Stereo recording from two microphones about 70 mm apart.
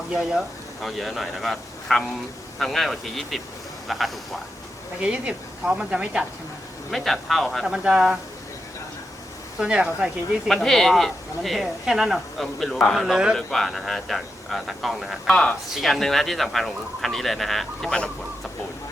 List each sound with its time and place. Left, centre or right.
0.1 s speech: centre
4.9 s speech: centre
6.9 s speech: centre
7.6 s speech: centre
9.6 s speech: centre
10.5 s speech: centre
15.3 s speech: centre